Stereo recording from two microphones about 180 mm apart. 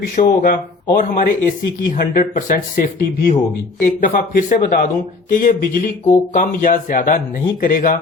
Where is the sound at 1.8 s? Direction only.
50° left (ahead or behind).